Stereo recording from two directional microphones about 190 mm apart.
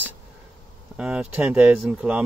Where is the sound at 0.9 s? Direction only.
5° right (ahead or behind).